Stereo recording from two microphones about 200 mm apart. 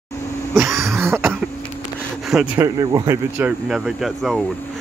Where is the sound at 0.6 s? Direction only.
15° right (ahead or behind).